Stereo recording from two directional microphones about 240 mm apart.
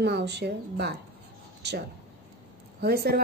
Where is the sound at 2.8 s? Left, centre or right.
Right.